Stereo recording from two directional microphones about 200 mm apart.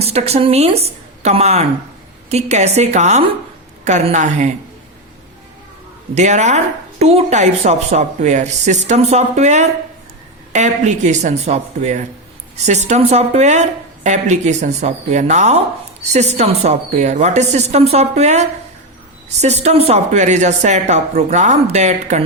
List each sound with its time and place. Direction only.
0.0 s speech: 30° right (ahead or behind)
6.1 s speech: 35° right (ahead or behind)